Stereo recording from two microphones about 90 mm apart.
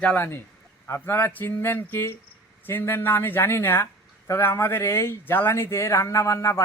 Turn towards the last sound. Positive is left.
turn(degrees=35)  # may be behind; listen again after turning